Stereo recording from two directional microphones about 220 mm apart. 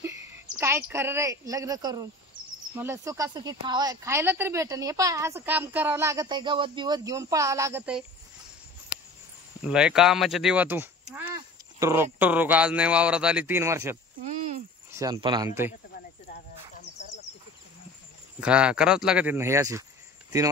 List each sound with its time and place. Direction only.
0.6 s speech: 10° right (ahead or behind)
9.7 s speech: 5° right (ahead or behind)
14.2 s cricket: 35° right (ahead or behind)
14.9 s speech: 15° right (ahead or behind)
18.4 s speech: 5° right (ahead or behind)